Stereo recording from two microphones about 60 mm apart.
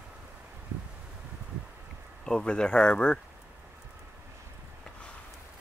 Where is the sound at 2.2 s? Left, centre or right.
Centre.